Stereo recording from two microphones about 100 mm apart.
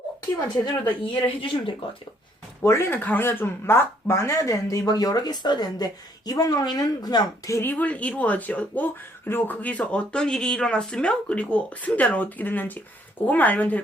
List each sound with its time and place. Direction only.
0.6 s speech: 50° left (ahead or behind)
2.6 s speech: 25° left (ahead or behind)
7.6 s speech: 15° left (ahead or behind)